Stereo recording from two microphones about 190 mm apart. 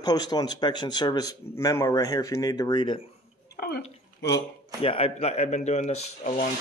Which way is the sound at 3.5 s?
55° left (ahead or behind).